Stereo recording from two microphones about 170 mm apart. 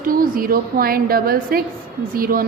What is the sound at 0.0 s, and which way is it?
A woman's voice, 55° right (ahead or behind).